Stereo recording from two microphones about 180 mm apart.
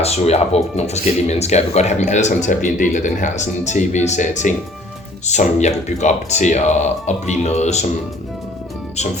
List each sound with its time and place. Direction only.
0.0 s speech: 35° left (ahead or behind)